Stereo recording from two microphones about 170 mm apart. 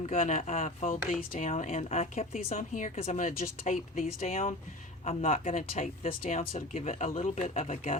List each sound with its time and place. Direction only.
0.0 s a woman's voice: 40° left (ahead or behind)
6.1 s a woman's voice: 50° left (ahead or behind)